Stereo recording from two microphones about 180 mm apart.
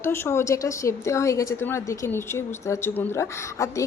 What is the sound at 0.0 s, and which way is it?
A woman's voice, 10° left (ahead or behind).